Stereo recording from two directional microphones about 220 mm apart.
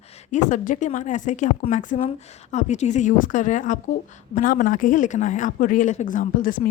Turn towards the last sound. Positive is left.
turn(degrees=40)  # may be behind; listen again after turning